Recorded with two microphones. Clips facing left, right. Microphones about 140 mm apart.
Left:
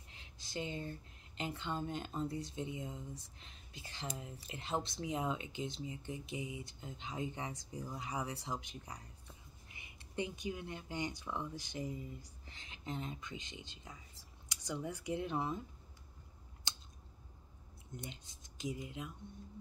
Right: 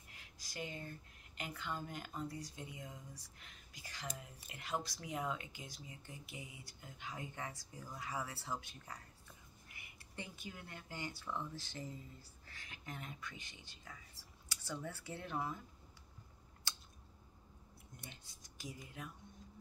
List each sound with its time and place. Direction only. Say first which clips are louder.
0.1 s speech: left 8 dB; 25° left (ahead or behind)
16.7 s scissors: left 1 dB; 20° left (ahead or behind)
17.9 s speech: left 9 dB; 20° left (ahead or behind)